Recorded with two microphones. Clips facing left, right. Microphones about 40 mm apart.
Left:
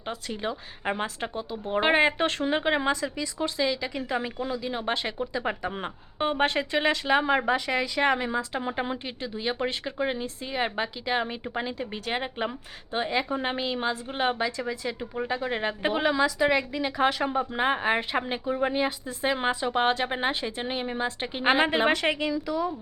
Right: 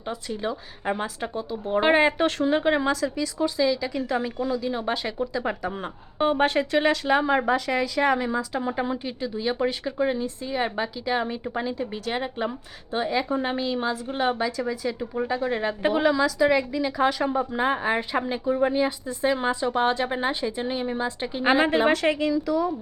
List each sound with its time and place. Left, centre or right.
0.3 s speech: centre